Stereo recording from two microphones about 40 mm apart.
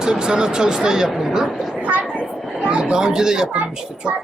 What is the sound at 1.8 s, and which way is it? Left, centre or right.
Vehicle, right.